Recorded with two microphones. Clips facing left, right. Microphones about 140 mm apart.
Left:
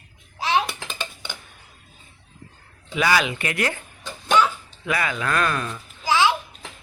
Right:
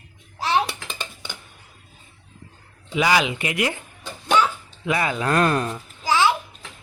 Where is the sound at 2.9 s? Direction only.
15° right (ahead or behind).